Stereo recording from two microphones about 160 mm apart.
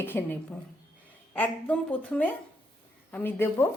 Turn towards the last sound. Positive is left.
turn(degrees=15)  # may be behind; listen again after turning